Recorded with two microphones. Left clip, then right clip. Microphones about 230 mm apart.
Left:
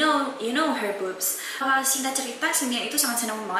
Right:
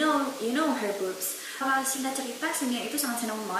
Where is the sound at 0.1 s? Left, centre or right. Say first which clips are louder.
Left 3 dB; right.